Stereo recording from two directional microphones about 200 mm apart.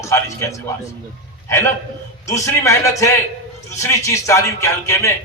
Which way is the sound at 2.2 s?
15° left (ahead or behind).